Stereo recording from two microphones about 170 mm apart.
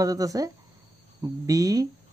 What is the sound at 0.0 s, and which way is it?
Speech, 20° right (ahead or behind).